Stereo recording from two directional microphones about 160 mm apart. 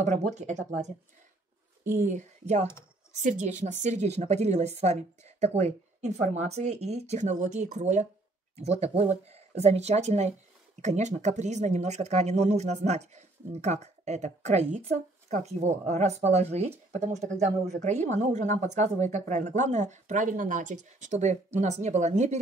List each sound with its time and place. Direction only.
0.0 s speech: 45° right (ahead or behind)
2.0 s speech: 50° right (ahead or behind)